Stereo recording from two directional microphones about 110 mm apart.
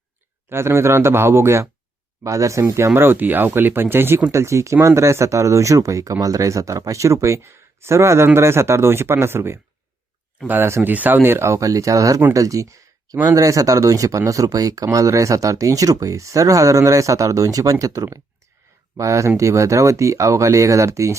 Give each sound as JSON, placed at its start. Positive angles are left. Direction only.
{"t": 0.5, "sound": "speech", "side_deg": -25}